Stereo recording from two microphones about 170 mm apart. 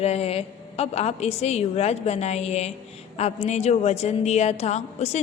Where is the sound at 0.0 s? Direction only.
35° left (ahead or behind).